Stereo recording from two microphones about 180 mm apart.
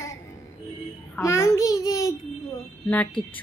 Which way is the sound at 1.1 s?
15° left (ahead or behind).